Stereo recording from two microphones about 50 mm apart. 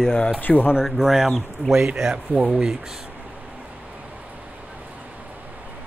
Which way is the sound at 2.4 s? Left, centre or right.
Centre.